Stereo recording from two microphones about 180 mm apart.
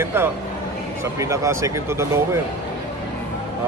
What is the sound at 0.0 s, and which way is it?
Speech, 15° right (ahead or behind).